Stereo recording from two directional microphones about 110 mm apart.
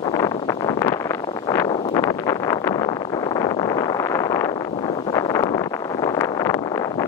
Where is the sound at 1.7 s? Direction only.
50° left (ahead or behind).